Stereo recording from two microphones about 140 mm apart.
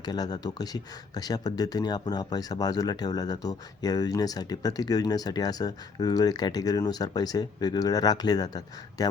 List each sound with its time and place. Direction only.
0.0 s speech: 30° left (ahead or behind)